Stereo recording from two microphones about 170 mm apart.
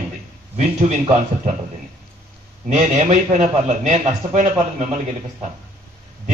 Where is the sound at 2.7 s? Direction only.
45° right (ahead or behind).